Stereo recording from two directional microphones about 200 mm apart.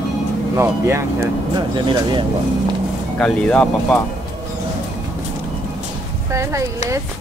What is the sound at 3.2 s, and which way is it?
Speech, 5° left (ahead or behind).